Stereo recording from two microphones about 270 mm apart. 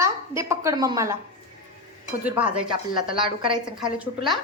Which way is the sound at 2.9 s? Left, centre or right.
Centre.